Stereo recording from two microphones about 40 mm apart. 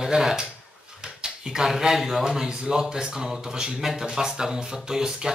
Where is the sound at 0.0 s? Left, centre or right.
Centre.